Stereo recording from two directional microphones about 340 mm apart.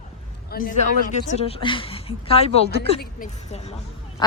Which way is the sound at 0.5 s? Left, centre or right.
Left.